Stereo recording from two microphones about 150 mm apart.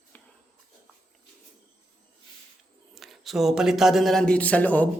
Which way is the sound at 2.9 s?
Centre (ahead or behind).